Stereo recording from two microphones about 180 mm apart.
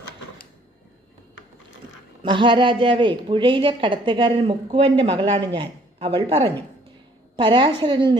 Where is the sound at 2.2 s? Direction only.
25° right (ahead or behind).